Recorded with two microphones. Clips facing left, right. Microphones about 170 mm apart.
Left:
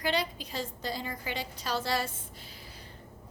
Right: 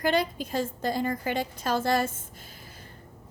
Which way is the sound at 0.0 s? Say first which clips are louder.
Right 6 dB; 50° right (ahead or behind).